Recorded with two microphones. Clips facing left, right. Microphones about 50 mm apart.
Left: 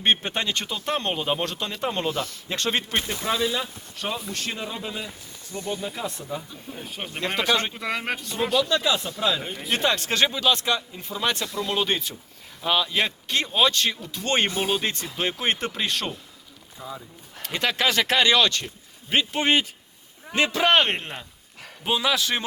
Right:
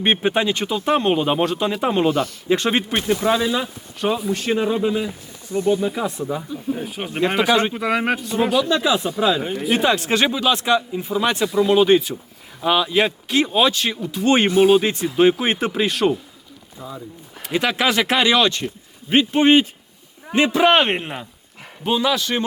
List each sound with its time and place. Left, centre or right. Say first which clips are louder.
0.0 s speech: right 5 dB; centre
2.0 s speech: right 8 dB; right
2.5 s speech: right 7 dB; centre
4.5 s speech: right 13 dB; centre
5.8 s speech: right 9 dB; centre
14.5 s speech: right 12 dB; right
14.8 s speech: right 11 dB; centre
17.4 s speech: right 4 dB; centre
21.8 s speech: right 4 dB; centre